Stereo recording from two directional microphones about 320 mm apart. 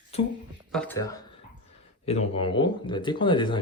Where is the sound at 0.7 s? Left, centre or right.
Centre.